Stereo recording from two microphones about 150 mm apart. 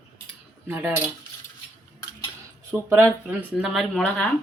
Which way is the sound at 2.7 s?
20° right (ahead or behind).